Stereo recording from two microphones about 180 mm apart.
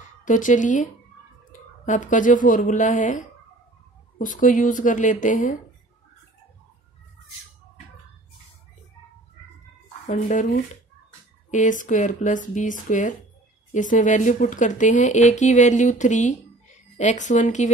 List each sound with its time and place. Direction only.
0.2 s speech: 45° left (ahead or behind)
10.0 s speech: 45° left (ahead or behind)